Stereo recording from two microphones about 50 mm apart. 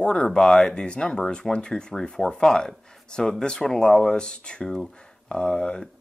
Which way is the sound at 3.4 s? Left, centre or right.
Centre.